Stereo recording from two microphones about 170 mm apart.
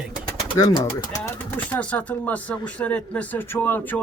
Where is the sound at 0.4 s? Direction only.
25° left (ahead or behind).